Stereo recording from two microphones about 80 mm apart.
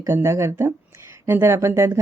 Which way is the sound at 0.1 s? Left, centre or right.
Right.